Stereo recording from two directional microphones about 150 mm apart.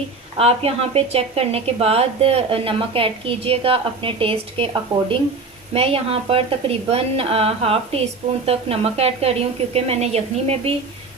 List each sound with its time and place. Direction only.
0.3 s a woman's voice: 40° right (ahead or behind)